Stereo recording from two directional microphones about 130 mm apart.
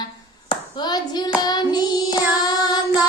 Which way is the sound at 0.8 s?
35° left (ahead or behind).